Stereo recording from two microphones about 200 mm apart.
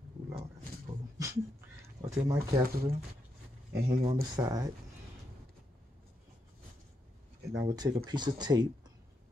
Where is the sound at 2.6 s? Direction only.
50° right (ahead or behind).